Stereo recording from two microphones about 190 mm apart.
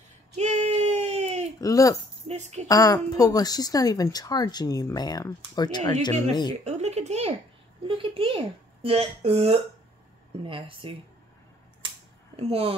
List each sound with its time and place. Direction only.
0.4 s a sound: 35° right (ahead or behind)
1.6 s speech: 20° left (ahead or behind)
2.2 s a woman's voice: 35° right (ahead or behind)
2.7 s a woman's voice: 20° left (ahead or behind)
6.6 s a sound: 35° right (ahead or behind)
7.8 s speech: 25° right (ahead or behind)
12.4 s a woman's voice: 30° right (ahead or behind)